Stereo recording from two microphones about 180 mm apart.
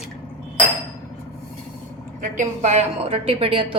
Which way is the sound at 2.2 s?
40° right (ahead or behind).